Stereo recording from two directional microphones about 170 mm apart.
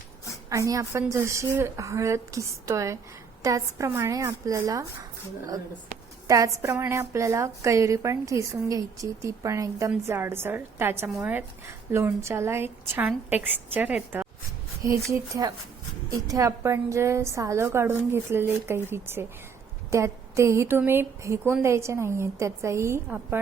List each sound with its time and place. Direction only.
0.5 s a woman's voice: 20° right (ahead or behind)
6.2 s a woman's voice: 20° right (ahead or behind)
15.1 s a woman's voice: 20° right (ahead or behind)